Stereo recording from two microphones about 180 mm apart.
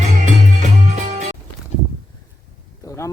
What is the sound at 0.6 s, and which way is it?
Music, 40° right (ahead or behind).